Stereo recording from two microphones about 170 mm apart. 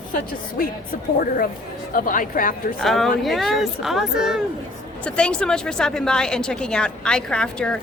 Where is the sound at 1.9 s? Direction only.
50° left (ahead or behind).